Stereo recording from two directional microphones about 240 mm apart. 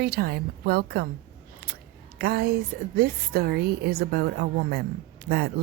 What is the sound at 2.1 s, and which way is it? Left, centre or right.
Speech, right.